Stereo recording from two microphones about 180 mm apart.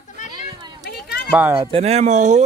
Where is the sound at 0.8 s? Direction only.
60° left (ahead or behind).